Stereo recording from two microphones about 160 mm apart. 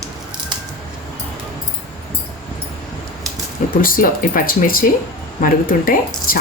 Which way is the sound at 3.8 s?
60° left (ahead or behind).